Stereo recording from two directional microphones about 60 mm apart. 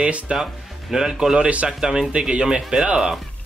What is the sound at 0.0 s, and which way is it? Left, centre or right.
Speech, centre.